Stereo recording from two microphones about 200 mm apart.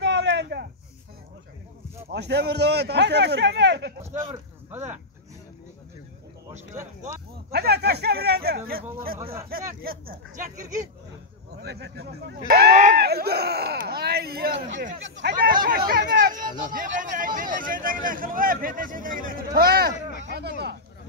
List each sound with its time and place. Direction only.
0.0 s a sound: 60° right (ahead or behind)
2.0 s a man's voice: 55° right (ahead or behind)
4.0 s speech: 15° right (ahead or behind)
7.5 s speech: 55° right (ahead or behind)
11.5 s speech: 55° right (ahead or behind)